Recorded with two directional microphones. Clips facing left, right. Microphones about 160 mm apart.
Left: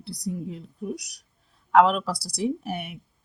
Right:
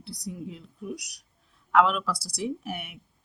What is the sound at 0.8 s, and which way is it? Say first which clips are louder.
A woman's voice: left 4 dB; 35° left (ahead or behind).